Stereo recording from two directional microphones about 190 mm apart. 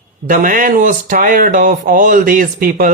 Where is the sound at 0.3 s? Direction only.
45° right (ahead or behind).